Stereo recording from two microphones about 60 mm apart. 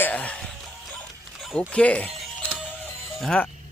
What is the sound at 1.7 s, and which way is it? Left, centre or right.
Speech, left.